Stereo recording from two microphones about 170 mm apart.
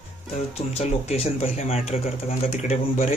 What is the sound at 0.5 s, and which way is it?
Speech, 40° left (ahead or behind).